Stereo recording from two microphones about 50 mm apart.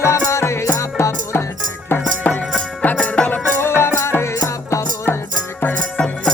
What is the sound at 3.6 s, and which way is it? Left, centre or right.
Music, left.